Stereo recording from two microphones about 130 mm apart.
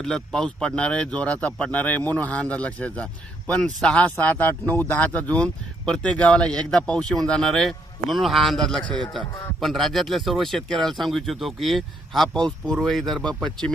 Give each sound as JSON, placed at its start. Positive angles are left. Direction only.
{"t": 0.0, "sound": "speech", "side_deg": 5}